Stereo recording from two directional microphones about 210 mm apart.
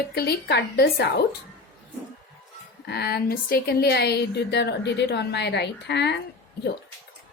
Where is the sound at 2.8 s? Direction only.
50° left (ahead or behind).